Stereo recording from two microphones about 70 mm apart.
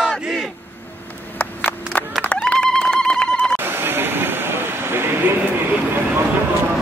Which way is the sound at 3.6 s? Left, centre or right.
Right.